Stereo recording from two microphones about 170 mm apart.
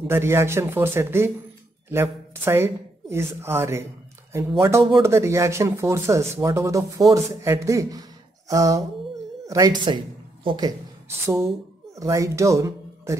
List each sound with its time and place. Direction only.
0.0 s a woman's voice: 15° right (ahead or behind)
9.8 s a sound: 25° right (ahead or behind)
11.2 s speech: 15° right (ahead or behind)